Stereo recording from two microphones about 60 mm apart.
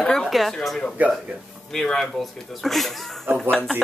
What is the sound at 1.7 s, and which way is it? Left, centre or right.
A woman's voice, centre.